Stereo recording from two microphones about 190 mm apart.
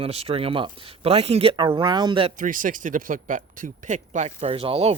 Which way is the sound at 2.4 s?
45° right (ahead or behind).